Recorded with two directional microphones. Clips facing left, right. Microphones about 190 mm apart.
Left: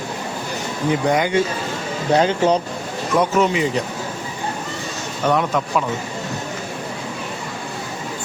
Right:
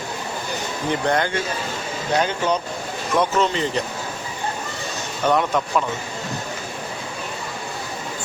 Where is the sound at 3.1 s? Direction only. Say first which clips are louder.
Left 3 dB; 10° left (ahead or behind).